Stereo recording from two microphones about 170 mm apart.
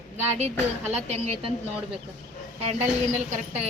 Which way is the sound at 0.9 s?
40° right (ahead or behind).